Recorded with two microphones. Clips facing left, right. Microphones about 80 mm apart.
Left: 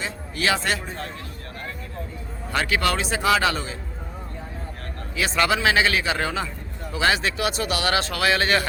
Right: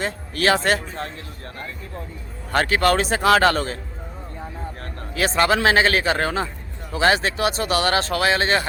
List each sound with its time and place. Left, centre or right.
0.0 s a man's voice: right
2.5 s a man's voice: right
5.1 s a man's voice: right